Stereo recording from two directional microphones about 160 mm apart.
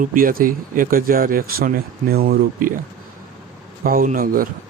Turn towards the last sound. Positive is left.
turn(degrees=-60)  # may be behind; listen again after turning